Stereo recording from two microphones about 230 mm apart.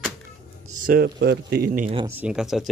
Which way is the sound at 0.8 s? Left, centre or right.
Right.